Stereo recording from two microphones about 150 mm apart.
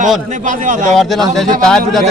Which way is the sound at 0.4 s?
60° right (ahead or behind).